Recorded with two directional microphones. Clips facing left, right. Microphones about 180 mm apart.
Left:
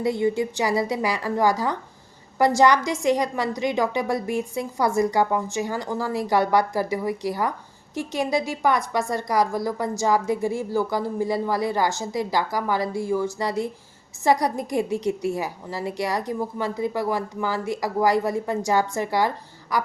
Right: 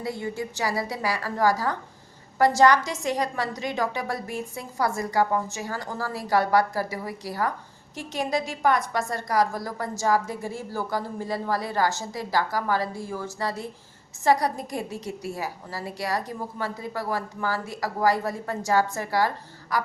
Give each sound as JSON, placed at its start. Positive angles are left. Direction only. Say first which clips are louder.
{"t": 0.0, "sound": "a woman's voice", "louder": "left 8 dB", "side_deg": 20}